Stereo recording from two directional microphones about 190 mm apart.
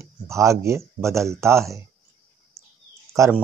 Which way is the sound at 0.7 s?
15° right (ahead or behind).